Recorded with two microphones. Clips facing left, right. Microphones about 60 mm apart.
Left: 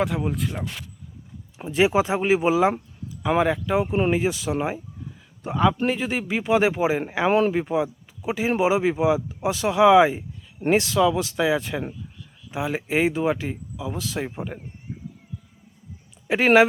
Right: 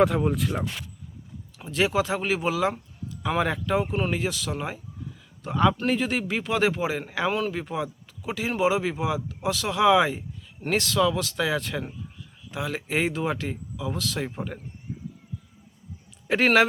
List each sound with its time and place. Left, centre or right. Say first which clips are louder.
0.0 s speech: right 3 dB; centre
1.5 s speech: left 4 dB; left
3.2 s speech: left 4 dB; centre
3.9 s a man's voice: left 5 dB; left
7.3 s speech: left 8 dB; left
7.5 s speech: left 7 dB; centre
16.2 s speech: left 1 dB; centre